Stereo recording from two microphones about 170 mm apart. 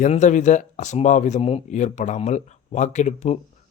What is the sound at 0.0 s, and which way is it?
Speech, 45° left (ahead or behind).